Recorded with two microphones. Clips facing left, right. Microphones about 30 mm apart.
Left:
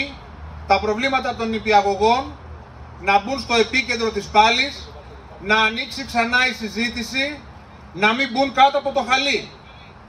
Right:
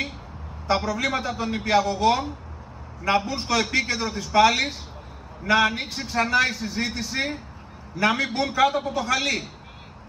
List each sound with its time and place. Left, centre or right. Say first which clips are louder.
0.7 s a man's voice: left 5 dB; left